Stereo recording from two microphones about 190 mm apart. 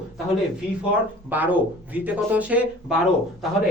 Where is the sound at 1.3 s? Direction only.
10° right (ahead or behind).